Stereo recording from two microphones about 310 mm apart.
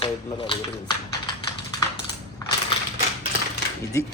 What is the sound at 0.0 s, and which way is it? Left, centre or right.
Speech, centre.